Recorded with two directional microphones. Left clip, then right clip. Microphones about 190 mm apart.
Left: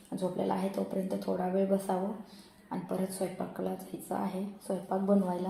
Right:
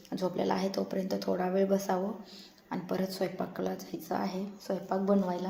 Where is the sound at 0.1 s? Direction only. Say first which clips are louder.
Right 1 dB; 5° right (ahead or behind).